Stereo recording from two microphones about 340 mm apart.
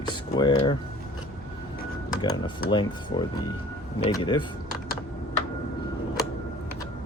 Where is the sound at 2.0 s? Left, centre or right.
Centre.